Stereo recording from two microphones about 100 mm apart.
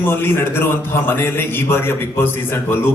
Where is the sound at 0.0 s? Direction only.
20° left (ahead or behind).